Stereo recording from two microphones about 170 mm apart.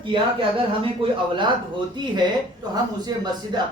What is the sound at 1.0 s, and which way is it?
Speech, 30° right (ahead or behind).